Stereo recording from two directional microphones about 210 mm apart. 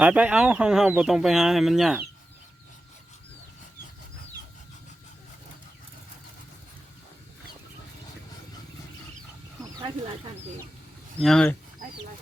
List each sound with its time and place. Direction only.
0.0 s speech: 5° right (ahead or behind)
11.2 s speech: 5° left (ahead or behind)